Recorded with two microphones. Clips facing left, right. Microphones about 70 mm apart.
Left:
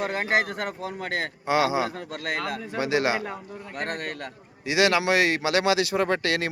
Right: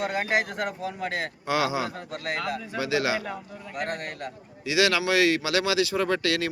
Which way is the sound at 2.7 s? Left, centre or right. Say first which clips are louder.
Left 2 dB; left.